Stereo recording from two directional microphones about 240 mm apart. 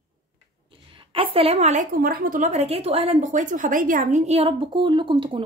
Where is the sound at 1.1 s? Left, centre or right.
Right.